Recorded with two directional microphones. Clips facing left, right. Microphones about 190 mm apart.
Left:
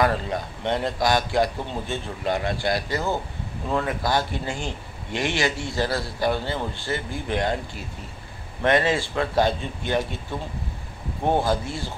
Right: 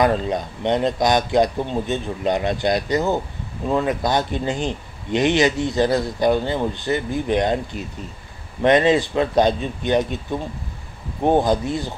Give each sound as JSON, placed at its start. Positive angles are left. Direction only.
{"t": 0.0, "sound": "a man's voice", "side_deg": -20}
{"t": 11.2, "sound": "a man's voice", "side_deg": -20}